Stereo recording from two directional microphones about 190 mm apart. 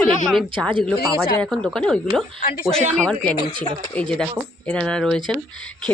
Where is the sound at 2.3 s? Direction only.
45° left (ahead or behind).